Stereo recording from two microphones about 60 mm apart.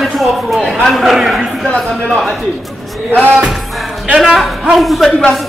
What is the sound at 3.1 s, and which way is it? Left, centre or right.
Music, right.